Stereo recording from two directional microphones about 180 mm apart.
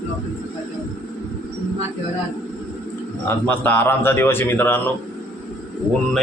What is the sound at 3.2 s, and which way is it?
A man's voice, 10° left (ahead or behind).